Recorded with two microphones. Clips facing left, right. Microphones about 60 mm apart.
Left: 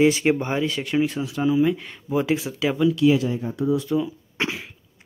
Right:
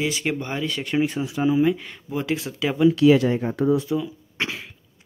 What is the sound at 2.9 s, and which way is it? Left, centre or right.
Speech, right.